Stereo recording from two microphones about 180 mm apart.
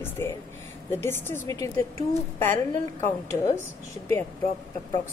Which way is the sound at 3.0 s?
15° left (ahead or behind).